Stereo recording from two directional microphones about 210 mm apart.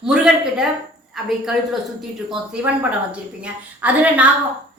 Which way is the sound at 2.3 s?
5° right (ahead or behind).